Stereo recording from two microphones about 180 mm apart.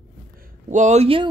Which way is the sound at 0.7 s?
40° right (ahead or behind).